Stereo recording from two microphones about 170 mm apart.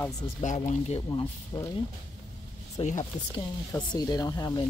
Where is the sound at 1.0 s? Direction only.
20° left (ahead or behind).